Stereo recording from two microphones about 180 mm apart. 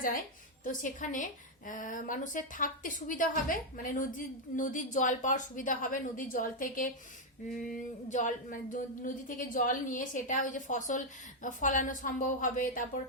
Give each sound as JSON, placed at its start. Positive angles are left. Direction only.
{"t": 0.6, "sound": "a woman's voice", "side_deg": 45}